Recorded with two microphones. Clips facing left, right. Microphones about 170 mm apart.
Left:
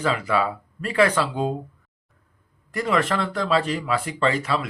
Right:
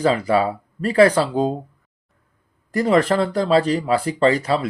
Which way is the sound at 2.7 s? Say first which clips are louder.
Right 6 dB; 35° right (ahead or behind).